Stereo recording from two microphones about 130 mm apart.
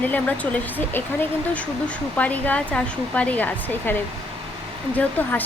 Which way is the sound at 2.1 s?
10° left (ahead or behind).